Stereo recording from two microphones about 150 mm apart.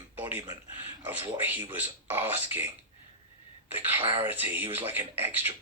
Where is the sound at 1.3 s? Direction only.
15° right (ahead or behind).